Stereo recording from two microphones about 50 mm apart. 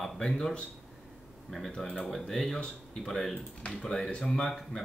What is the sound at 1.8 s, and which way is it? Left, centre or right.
Speech, centre.